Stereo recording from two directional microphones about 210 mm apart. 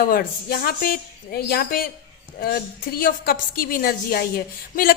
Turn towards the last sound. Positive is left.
turn(degrees=45)  # may be behind; listen again after turning